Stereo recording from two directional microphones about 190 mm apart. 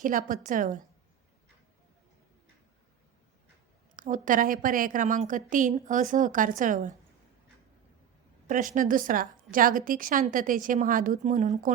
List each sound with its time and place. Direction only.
0.0 s a woman's voice: 45° right (ahead or behind)
3.9 s a woman's voice: 45° right (ahead or behind)
8.4 s a woman's voice: 45° right (ahead or behind)